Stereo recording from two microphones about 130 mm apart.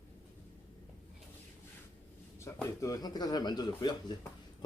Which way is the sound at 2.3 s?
25° left (ahead or behind).